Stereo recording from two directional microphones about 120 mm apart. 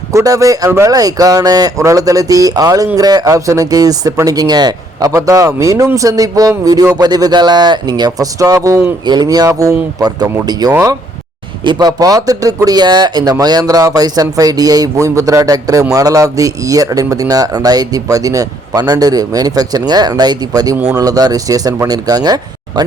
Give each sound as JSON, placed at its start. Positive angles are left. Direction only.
{"t": 0.1, "sound": "speech", "side_deg": -25}